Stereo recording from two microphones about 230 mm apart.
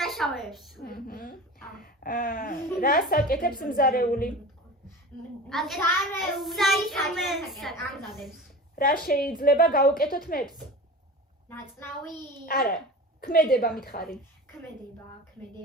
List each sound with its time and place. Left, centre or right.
0.0 s a sound: centre
0.8 s a woman's voice: left
5.5 s a child's voice: centre
8.7 s a woman's voice: left
12.5 s a woman's voice: left